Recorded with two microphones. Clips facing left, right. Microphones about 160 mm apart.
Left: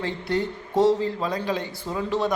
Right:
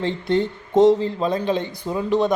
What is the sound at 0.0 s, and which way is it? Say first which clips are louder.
Speech: right 5 dB; 20° right (ahead or behind).